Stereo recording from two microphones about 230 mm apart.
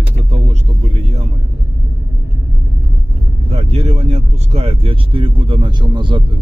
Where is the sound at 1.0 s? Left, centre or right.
Right.